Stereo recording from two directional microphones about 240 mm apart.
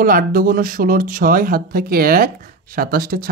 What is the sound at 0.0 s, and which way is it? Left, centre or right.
Speech, right.